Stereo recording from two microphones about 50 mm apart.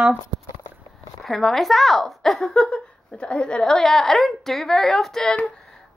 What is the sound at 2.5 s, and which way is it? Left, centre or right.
A woman's voice, centre.